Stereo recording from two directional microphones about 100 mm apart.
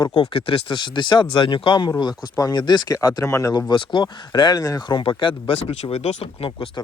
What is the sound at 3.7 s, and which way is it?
Speech, 50° left (ahead or behind).